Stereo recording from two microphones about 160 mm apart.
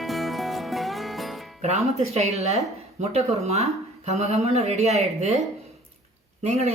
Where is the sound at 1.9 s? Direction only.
45° right (ahead or behind).